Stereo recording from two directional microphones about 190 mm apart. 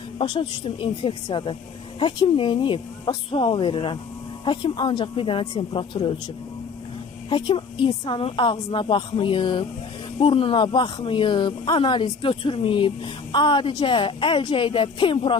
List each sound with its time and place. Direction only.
0.2 s speech: 25° left (ahead or behind)
7.3 s speech: 25° left (ahead or behind)